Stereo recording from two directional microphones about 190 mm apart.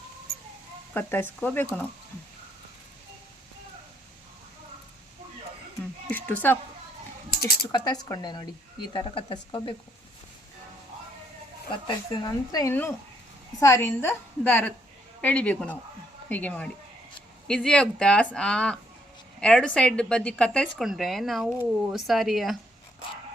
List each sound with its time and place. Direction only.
0.9 s a woman's voice: 10° left (ahead or behind)
6.1 s speech: 10° left (ahead or behind)
7.7 s speech: 20° left (ahead or behind)
11.9 s a woman's voice: 20° left (ahead or behind); by 22.5 s centre (ahead or behind)